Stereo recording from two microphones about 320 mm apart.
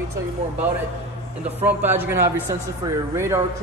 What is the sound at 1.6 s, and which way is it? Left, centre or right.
A man's voice, centre.